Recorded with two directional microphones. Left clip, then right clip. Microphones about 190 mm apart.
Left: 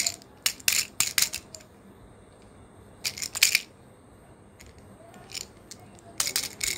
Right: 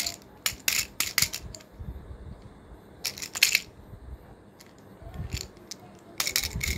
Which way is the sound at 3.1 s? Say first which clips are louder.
Even; 10° left (ahead or behind).